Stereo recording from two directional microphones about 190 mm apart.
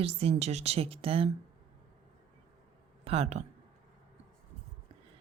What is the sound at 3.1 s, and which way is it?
Speech, 35° right (ahead or behind).